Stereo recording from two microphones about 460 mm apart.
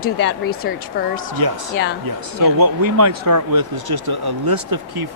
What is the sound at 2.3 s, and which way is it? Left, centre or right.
Speech, right.